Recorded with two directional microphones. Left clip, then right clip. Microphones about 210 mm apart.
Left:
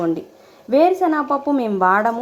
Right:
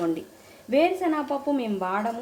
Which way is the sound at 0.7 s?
20° left (ahead or behind).